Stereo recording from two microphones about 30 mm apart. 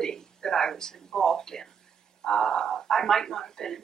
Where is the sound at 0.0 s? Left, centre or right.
Left.